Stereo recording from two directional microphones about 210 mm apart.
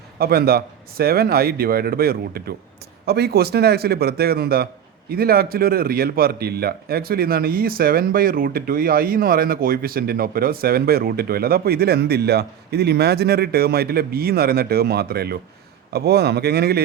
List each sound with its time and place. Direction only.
0.2 s speech: 45° right (ahead or behind)